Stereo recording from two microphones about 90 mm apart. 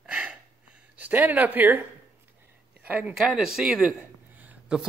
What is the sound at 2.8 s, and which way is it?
Speech, 20° right (ahead or behind).